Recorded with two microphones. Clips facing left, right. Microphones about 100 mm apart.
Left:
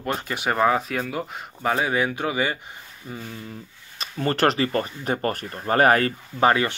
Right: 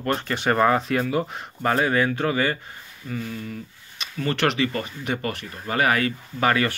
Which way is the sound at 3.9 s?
40° left (ahead or behind).